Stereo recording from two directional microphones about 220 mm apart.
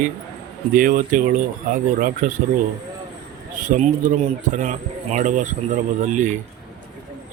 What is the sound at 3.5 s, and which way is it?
Speech, 35° right (ahead or behind).